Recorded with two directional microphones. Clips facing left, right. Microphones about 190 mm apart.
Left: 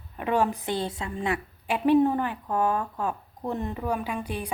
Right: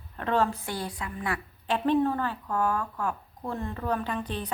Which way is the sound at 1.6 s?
10° left (ahead or behind).